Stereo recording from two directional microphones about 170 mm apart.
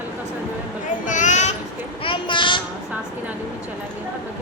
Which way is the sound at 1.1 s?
45° left (ahead or behind).